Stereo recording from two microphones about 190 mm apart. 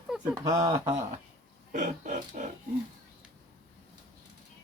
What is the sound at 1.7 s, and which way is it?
Speech, 40° right (ahead or behind).